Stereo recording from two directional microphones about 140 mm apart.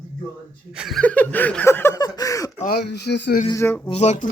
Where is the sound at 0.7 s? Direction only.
5° right (ahead or behind).